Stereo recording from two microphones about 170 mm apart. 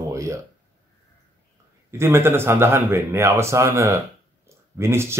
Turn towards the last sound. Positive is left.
turn(degrees=-15)  # may be behind; listen again after turning